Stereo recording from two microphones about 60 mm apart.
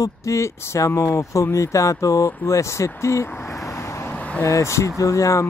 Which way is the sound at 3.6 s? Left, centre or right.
Left.